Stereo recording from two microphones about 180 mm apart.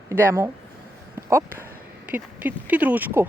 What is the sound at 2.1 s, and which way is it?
Speech, 10° right (ahead or behind).